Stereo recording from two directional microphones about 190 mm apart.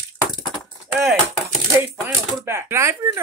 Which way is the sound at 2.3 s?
15° right (ahead or behind).